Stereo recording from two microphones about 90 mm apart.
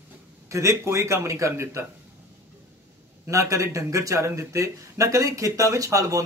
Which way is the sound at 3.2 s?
35° right (ahead or behind).